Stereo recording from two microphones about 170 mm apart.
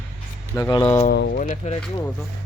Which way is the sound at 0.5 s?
20° left (ahead or behind).